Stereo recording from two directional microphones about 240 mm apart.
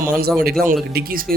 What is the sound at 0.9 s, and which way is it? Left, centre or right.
Speech, right.